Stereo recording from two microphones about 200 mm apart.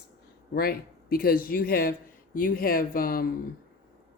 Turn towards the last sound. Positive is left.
turn(degrees=45)  # may be behind; listen again after turning